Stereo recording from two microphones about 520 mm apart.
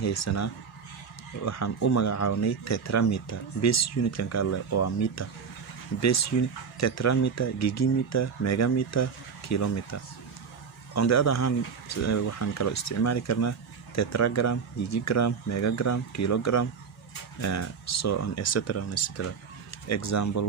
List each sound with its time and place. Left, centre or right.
0.0 s speech: left
10.9 s speech: left